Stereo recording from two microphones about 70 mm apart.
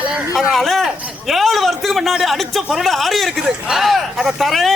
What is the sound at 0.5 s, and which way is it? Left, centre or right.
A man's voice, centre.